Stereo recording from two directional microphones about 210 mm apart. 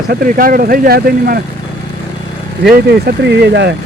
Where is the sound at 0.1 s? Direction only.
45° right (ahead or behind).